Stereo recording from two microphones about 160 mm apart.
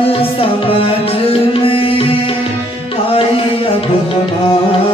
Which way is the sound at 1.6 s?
35° left (ahead or behind).